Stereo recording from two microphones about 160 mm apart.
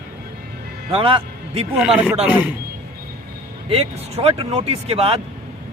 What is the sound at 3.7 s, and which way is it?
Speech, 35° right (ahead or behind).